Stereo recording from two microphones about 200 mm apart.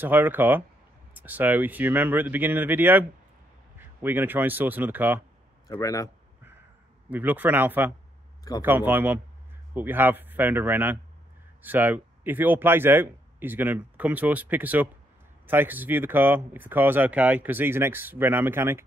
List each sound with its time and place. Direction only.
0.0 s speech: 10° right (ahead or behind)
5.7 s speech: 15° left (ahead or behind)
7.1 s speech: 10° right (ahead or behind)